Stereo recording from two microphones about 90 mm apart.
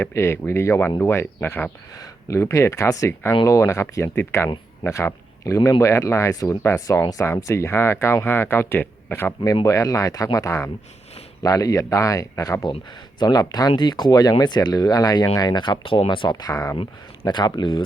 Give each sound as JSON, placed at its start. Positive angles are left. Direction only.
{"t": 0.0, "sound": "speech", "side_deg": 30}
{"t": 2.2, "sound": "speech", "side_deg": 35}
{"t": 9.6, "sound": "speech", "side_deg": 40}
{"t": 13.1, "sound": "speech", "side_deg": 50}
{"t": 15.4, "sound": "speech", "side_deg": 55}
{"t": 17.2, "sound": "speech", "side_deg": 55}